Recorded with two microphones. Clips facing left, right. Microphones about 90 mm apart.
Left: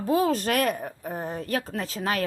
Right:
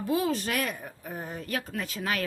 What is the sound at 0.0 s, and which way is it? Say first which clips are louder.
A woman's voice: left 4 dB; 40° left (ahead or behind).